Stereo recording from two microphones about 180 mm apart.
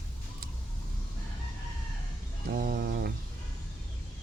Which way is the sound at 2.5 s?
55° right (ahead or behind).